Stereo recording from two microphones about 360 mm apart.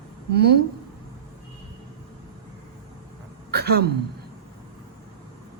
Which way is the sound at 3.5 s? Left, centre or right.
Right.